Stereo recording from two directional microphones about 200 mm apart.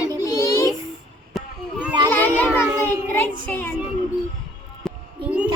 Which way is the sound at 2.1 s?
10° left (ahead or behind).